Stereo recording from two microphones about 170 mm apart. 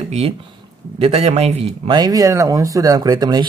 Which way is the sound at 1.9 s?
20° right (ahead or behind).